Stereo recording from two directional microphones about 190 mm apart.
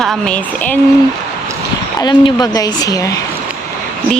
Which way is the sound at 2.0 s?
20° left (ahead or behind).